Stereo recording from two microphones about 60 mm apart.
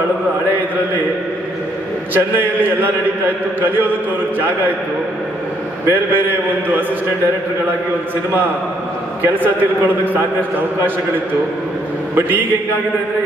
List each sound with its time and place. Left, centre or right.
2.1 s a man's voice: right
5.9 s a man's voice: right
9.2 s a man's voice: right
12.2 s a man's voice: right